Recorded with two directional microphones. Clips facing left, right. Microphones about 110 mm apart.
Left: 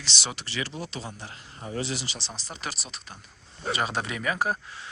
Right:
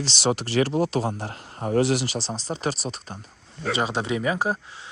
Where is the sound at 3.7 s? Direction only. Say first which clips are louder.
Right 4 dB; 20° right (ahead or behind).